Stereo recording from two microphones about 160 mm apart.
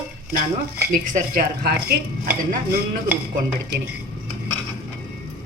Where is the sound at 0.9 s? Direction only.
55° right (ahead or behind).